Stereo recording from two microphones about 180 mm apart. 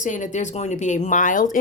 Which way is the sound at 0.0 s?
45° left (ahead or behind).